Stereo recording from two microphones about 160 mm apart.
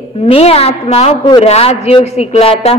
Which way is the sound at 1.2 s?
30° left (ahead or behind).